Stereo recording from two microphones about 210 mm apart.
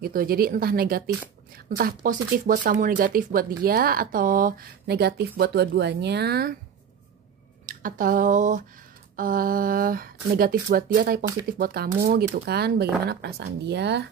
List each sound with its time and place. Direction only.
0.0 s speech: 45° right (ahead or behind)
7.6 s speech: 40° right (ahead or behind)